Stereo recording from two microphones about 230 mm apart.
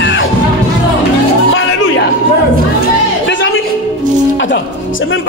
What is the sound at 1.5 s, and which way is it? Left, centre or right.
Music, left.